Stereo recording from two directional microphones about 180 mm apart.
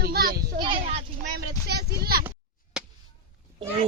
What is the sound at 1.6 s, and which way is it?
Speech, 60° right (ahead or behind).